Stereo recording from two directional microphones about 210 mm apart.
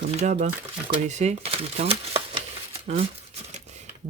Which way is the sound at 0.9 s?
35° right (ahead or behind).